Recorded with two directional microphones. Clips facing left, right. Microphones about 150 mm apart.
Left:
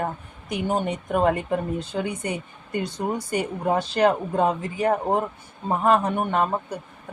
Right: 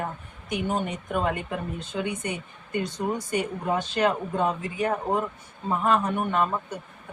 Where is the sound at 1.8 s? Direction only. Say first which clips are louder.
Left 2 dB; 35° left (ahead or behind).